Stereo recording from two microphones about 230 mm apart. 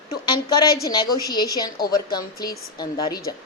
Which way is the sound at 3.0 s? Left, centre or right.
Centre.